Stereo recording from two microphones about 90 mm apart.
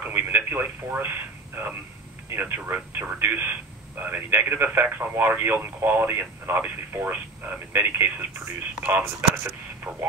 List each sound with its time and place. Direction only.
0.0 s radio: 25° right (ahead or behind)
2.2 s speech: 25° right (ahead or behind)